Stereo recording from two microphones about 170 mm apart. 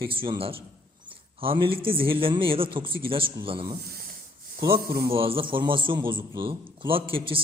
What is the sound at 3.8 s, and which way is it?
Rub, 60° right (ahead or behind).